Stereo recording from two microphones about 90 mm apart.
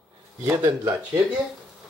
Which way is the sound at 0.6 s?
40° right (ahead or behind).